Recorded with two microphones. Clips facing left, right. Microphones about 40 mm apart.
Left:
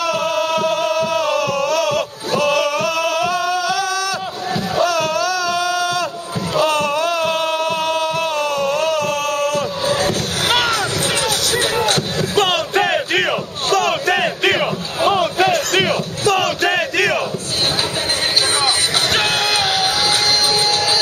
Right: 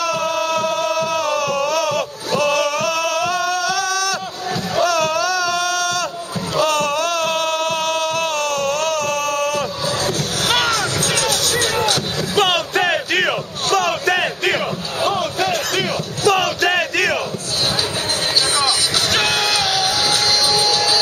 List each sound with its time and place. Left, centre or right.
0.0 s music: centre
4.7 s a sound: centre
6.5 s music: centre
9.8 s crowd: centre
11.2 s music: centre
12.2 s a sound: centre
14.4 s battle cry: centre
15.1 s crowd: left
16.3 s battle cry: centre
19.8 s music: left